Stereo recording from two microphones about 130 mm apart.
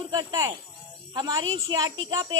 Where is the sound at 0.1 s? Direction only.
30° right (ahead or behind).